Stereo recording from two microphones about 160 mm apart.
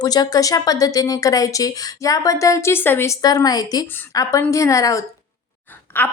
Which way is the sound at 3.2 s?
25° left (ahead or behind).